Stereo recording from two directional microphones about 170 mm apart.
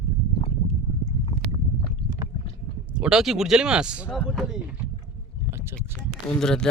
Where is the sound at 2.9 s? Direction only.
5° right (ahead or behind).